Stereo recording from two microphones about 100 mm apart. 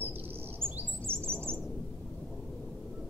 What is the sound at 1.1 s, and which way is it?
Bird, 70° right (ahead or behind).